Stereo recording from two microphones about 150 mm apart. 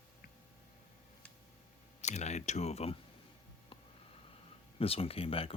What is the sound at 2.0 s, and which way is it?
Speech, 50° left (ahead or behind).